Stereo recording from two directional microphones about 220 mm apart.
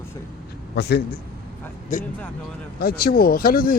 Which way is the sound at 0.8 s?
50° left (ahead or behind).